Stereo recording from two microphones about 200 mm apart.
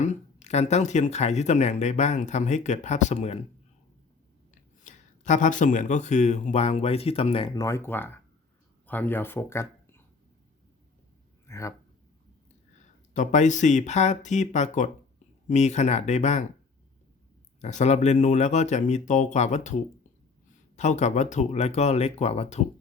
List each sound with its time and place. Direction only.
0.0 s speech: 35° left (ahead or behind)
4.8 s speech: 35° left (ahead or behind); by 10.0 s 10° left (ahead or behind)
11.4 s speech: 15° left (ahead or behind)
13.1 s speech: 35° left (ahead or behind)
17.6 s speech: 35° left (ahead or behind)
20.7 s speech: 35° left (ahead or behind)